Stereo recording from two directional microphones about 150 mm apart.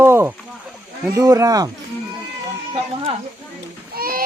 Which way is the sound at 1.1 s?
20° right (ahead or behind).